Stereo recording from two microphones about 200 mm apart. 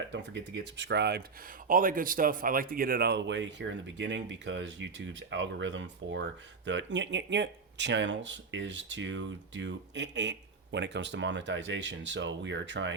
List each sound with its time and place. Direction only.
0.1 s speech: 60° right (ahead or behind)
1.6 s speech: 45° right (ahead or behind); by 12.9 s 65° right (ahead or behind)